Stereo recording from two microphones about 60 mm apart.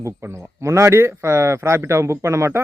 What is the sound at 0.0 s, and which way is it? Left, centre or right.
Speech, right.